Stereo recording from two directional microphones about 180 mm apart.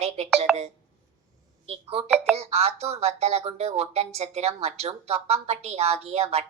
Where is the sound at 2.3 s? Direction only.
35° right (ahead or behind).